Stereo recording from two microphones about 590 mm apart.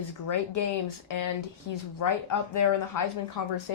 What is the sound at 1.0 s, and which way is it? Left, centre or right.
Speech, left.